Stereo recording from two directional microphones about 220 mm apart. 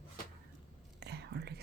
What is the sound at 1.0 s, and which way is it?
Whispering, 50° right (ahead or behind).